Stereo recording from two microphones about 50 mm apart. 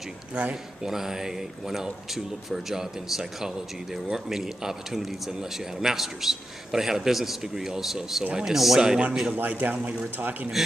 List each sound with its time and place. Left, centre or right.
0.3 s speech: right
0.8 s speech: centre
8.2 s speech: centre
9.3 s a man's voice: right